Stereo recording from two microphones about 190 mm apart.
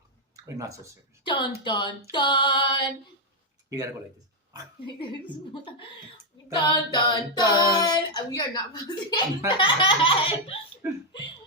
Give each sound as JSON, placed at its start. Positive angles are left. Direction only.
{"t": 0.4, "sound": "speech", "side_deg": -15}
{"t": 1.2, "sound": "speech", "side_deg": 25}
{"t": 6.5, "sound": "speech", "side_deg": 25}